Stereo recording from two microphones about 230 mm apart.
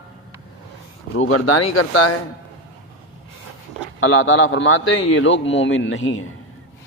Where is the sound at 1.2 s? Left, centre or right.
Left.